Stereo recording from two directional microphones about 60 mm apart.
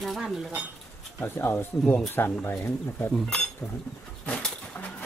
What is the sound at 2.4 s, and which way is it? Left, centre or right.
Speech, left.